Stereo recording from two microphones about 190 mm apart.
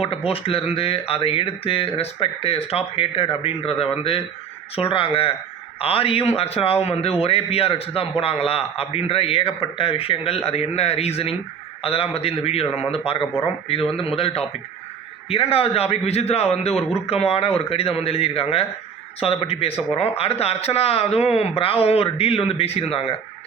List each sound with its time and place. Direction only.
0.3 s a man's voice: 30° left (ahead or behind)